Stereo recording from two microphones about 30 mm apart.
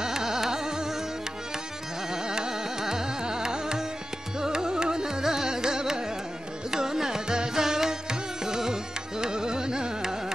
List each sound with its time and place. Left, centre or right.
0.0 s carnatic music: centre
2.2 s carnatic music: right
6.7 s music: centre
9.2 s carnatic music: right